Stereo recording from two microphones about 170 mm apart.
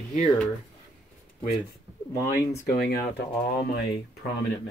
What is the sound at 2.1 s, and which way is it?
Speech, 20° left (ahead or behind).